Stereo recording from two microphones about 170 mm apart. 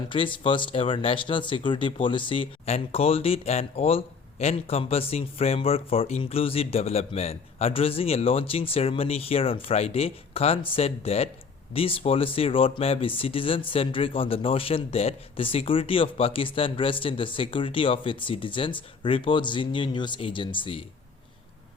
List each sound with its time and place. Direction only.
0.1 s speech: 30° left (ahead or behind)